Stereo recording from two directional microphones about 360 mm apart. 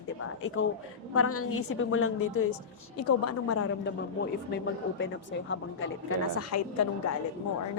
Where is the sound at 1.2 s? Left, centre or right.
Left.